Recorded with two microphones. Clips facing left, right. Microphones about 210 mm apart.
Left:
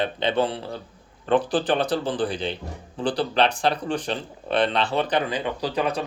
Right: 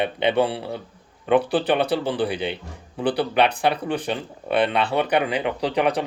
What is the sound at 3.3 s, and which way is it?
Speech, 10° right (ahead or behind).